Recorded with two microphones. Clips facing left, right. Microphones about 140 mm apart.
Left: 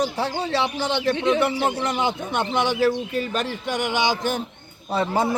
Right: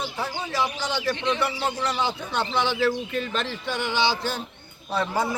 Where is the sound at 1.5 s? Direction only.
55° left (ahead or behind).